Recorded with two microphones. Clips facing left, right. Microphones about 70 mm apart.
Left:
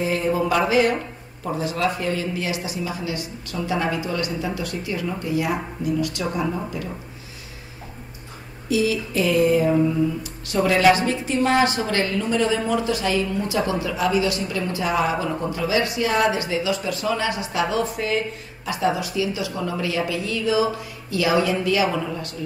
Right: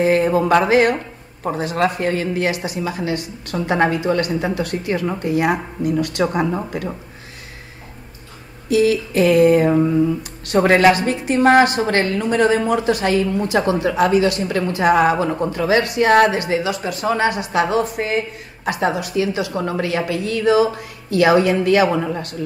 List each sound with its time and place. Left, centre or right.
0.0 s a woman's voice: right
8.6 s a woman's voice: right
18.7 s a woman's voice: right